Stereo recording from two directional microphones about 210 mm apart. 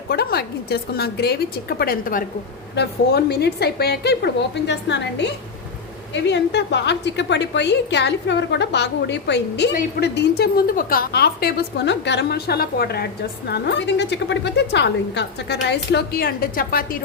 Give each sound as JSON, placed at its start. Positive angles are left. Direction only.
{"t": 0.1, "sound": "a woman's voice", "side_deg": 50}